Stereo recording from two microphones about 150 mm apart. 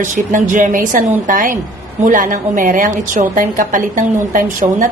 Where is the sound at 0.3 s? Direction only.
60° right (ahead or behind).